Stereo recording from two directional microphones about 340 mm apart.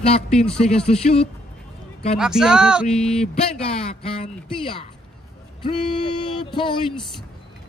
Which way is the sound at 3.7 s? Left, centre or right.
Centre.